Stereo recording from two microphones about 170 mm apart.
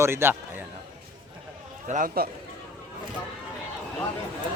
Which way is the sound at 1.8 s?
45° right (ahead or behind).